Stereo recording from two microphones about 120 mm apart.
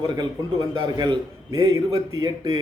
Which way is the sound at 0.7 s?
40° right (ahead or behind).